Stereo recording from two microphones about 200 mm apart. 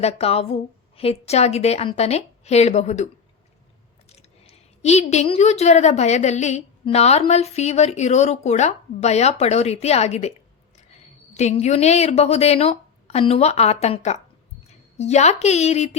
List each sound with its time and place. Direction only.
0.0 s a woman's voice: 30° left (ahead or behind)
4.1 s a woman's voice: 30° left (ahead or behind)
11.3 s a woman's voice: 35° left (ahead or behind)